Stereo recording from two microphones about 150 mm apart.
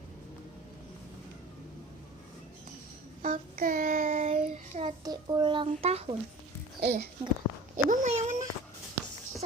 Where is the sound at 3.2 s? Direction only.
70° right (ahead or behind); by 4.9 s 50° right (ahead or behind).